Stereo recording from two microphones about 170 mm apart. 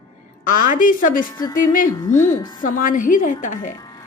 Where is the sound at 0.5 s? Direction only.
50° left (ahead or behind).